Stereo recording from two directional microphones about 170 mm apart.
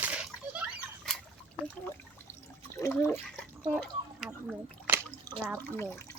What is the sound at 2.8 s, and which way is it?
Speech, 15° left (ahead or behind).